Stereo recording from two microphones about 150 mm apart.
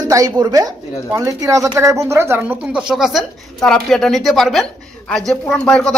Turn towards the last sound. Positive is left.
turn(degrees=5)  # may be behind; listen again after turning